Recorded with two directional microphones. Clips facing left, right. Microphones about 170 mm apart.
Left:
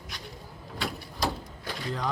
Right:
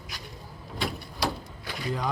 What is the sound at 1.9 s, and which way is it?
Speech, 10° right (ahead or behind).